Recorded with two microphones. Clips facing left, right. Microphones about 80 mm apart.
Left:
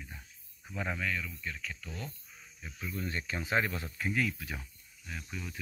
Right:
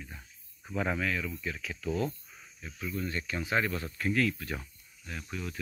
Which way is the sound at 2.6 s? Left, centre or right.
Centre.